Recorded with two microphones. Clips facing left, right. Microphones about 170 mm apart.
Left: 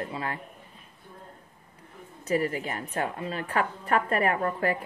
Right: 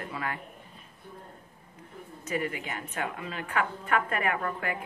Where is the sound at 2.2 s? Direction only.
35° left (ahead or behind).